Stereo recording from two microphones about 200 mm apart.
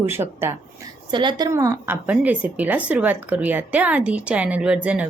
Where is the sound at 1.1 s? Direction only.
20° right (ahead or behind).